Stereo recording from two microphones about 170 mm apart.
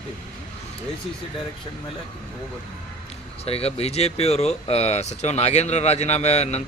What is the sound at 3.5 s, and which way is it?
Speech, 35° left (ahead or behind).